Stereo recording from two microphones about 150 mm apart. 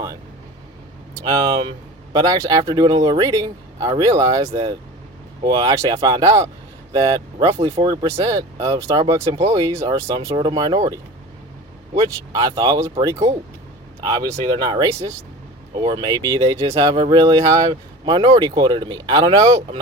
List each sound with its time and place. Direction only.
1.2 s speech: 30° right (ahead or behind)
11.9 s speech: 25° right (ahead or behind)